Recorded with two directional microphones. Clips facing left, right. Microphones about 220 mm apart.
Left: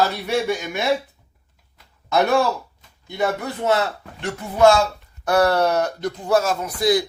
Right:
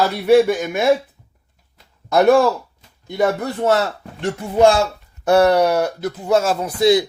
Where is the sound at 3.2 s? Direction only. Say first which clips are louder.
Right 5 dB; 45° right (ahead or behind).